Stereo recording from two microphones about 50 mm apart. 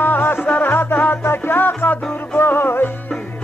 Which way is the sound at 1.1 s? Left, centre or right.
Left.